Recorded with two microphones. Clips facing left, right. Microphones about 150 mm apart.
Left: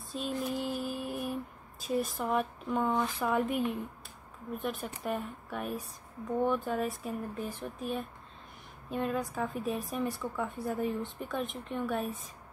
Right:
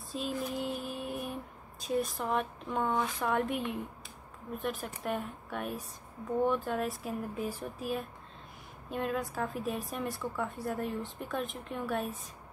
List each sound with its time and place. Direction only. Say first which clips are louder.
0.1 s mantra: left 1 dB; centre (ahead or behind)
3.0 s a woman's voice: left 1 dB; centre (ahead or behind)